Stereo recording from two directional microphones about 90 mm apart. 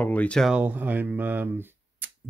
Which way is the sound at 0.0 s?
15° left (ahead or behind).